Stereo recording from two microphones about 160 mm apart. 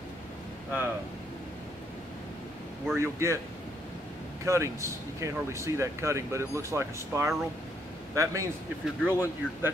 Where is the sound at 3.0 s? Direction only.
15° right (ahead or behind).